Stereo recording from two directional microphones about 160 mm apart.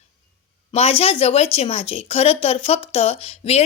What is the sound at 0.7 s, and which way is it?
A woman's voice, 40° left (ahead or behind).